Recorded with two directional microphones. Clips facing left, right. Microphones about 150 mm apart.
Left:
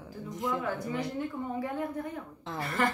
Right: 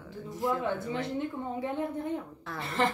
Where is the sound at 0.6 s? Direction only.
25° right (ahead or behind).